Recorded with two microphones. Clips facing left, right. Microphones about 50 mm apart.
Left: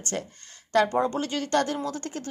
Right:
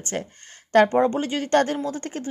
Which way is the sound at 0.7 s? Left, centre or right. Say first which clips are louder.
Right 5 dB; right.